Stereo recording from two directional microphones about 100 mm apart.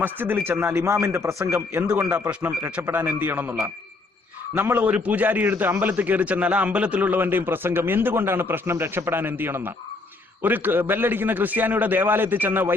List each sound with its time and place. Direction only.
0.0 s a man's voice: 20° right (ahead or behind)
1.9 s a man's voice: 15° right (ahead or behind)